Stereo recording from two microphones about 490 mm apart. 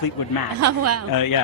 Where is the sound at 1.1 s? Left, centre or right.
Left.